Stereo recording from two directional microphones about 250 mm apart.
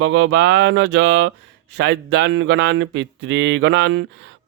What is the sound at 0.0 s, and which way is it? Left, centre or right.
Speech, right.